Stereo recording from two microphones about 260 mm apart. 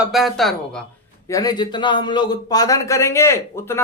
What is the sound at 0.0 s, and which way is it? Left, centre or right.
Speech, centre.